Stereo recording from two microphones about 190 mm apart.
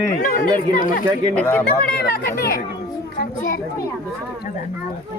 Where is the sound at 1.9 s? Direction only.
55° left (ahead or behind).